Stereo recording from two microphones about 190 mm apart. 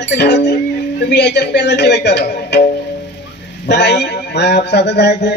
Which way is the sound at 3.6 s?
65° left (ahead or behind).